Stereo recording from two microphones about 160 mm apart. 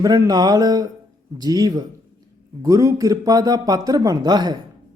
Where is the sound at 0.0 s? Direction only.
25° right (ahead or behind).